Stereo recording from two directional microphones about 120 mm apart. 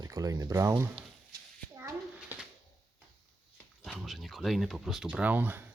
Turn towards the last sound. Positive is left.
turn(degrees=-15)  # may be behind; listen again after turning